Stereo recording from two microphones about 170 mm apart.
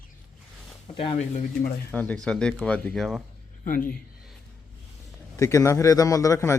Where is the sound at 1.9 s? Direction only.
10° left (ahead or behind).